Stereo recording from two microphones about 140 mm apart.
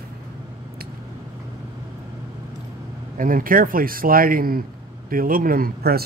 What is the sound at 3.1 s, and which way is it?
Speech, 80° right.